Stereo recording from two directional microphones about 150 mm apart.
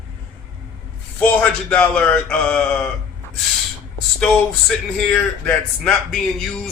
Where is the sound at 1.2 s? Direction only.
10° left (ahead or behind).